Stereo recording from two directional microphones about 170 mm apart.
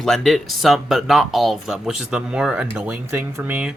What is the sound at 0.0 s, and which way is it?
Speech, centre (ahead or behind).